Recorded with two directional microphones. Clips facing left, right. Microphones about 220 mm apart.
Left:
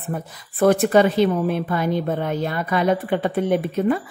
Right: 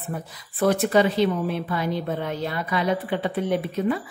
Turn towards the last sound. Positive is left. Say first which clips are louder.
# left 4 dB
turn(degrees=50)  # may be behind; listen again after turning